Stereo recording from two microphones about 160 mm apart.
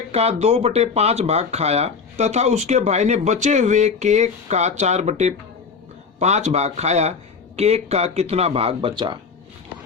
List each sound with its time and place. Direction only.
0.1 s speech: 40° right (ahead or behind)